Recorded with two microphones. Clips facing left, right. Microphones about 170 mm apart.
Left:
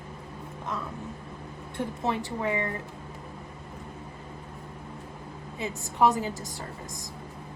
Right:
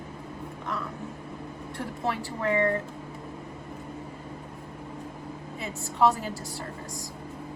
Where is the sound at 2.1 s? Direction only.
20° left (ahead or behind).